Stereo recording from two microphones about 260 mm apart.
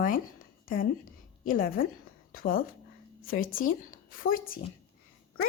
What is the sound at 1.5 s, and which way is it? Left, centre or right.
A woman's voice, left.